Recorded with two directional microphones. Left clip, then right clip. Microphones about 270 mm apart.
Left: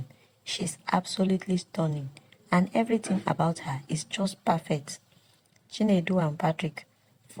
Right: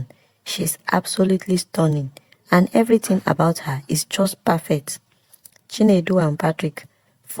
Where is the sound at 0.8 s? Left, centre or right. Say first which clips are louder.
Right 8 dB; right.